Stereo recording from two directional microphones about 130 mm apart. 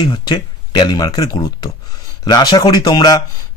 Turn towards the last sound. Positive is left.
turn(degrees=30)  # may be behind; listen again after turning